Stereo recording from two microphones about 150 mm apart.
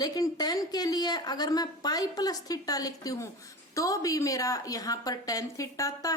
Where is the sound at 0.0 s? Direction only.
25° left (ahead or behind).